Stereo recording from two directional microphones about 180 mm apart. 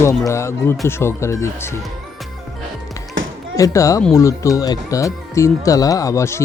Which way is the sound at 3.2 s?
90° right.